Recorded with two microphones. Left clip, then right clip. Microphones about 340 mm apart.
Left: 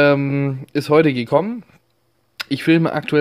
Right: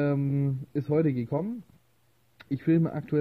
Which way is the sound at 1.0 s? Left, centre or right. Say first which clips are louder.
Left 11 dB; left.